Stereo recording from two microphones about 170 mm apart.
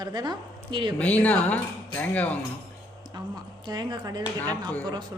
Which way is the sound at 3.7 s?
25° right (ahead or behind).